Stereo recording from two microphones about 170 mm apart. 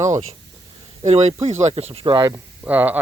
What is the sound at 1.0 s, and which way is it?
Speech, 40° right (ahead or behind).